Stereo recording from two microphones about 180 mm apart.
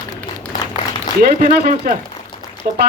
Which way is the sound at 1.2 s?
55° right (ahead or behind).